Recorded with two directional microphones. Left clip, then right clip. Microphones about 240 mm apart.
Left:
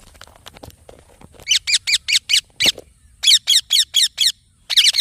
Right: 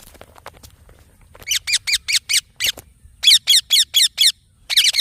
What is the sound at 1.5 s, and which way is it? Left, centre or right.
Squeak, centre.